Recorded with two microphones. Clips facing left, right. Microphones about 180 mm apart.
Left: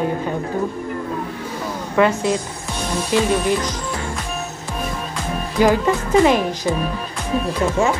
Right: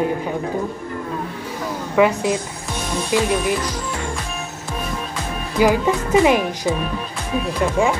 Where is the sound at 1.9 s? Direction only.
15° right (ahead or behind).